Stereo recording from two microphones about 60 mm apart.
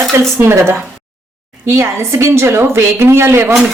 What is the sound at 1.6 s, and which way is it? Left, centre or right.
Speech, right.